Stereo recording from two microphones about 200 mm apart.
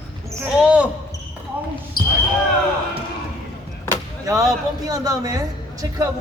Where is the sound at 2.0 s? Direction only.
50° left (ahead or behind).